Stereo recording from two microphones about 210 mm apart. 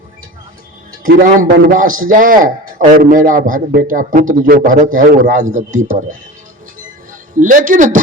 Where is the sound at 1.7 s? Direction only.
40° right (ahead or behind).